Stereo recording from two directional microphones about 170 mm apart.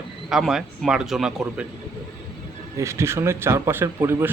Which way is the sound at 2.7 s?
15° right (ahead or behind).